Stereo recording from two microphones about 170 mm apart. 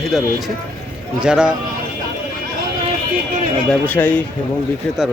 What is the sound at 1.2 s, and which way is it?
Speech, 5° right (ahead or behind).